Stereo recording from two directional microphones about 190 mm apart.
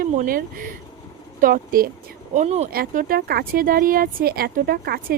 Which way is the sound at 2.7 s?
45° right (ahead or behind).